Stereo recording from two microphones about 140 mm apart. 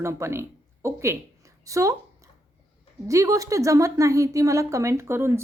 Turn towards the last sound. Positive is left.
turn(degrees=-20)  # may be behind; listen again after turning